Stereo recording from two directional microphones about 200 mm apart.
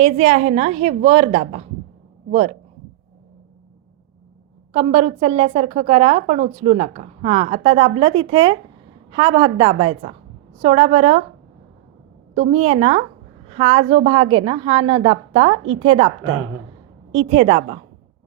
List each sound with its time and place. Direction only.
0.0 s a woman's voice: 35° right (ahead or behind)
4.7 s a woman's voice: 30° right (ahead or behind)
12.3 s a woman's voice: 35° right (ahead or behind)